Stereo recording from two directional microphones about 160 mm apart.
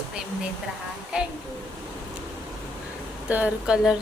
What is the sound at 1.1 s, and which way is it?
Speech, 5° right (ahead or behind).